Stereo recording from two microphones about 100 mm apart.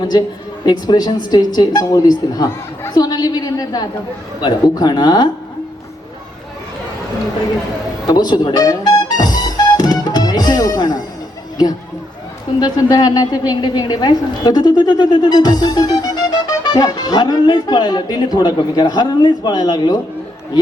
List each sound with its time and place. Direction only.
0.1 s a woman's voice: 40° left (ahead or behind)
8.0 s music: 45° left (ahead or behind)
12.5 s a woman's voice: 40° left (ahead or behind)